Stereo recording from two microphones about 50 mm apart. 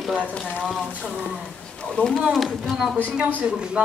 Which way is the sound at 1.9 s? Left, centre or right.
Centre.